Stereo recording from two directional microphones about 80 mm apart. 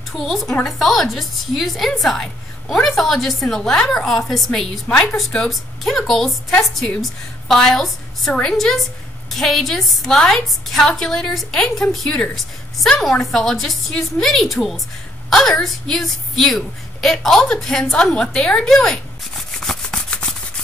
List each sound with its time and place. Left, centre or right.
0.1 s a woman's voice: centre
19.6 s rub: centre